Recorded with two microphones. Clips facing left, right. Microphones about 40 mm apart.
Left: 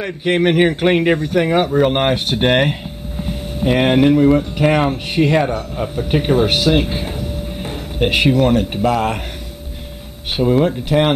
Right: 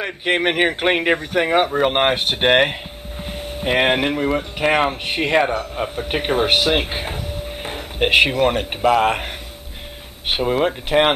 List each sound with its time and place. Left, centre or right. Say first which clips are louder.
0.0 s speech: left 3 dB; centre
10.3 s speech: left 4 dB; right